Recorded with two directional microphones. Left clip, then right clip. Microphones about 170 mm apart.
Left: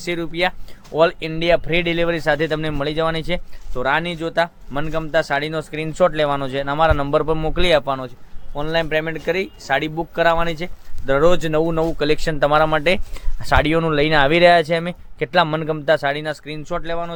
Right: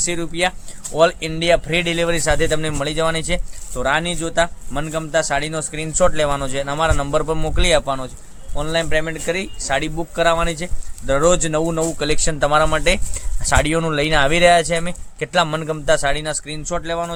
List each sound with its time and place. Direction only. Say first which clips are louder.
0.0 s speech: right 1 dB; 50° left (ahead or behind)